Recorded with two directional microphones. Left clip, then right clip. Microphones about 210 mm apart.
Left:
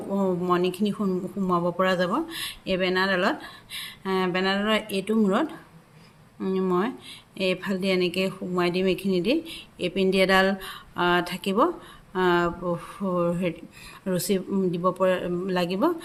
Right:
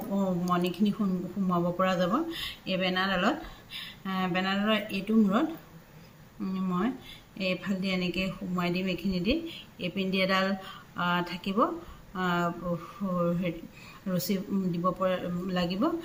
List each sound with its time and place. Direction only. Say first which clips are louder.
0.2 s speech: left 6 dB; 55° left (ahead or behind)